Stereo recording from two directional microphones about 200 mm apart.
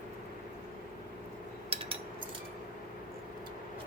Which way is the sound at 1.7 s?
30° right (ahead or behind).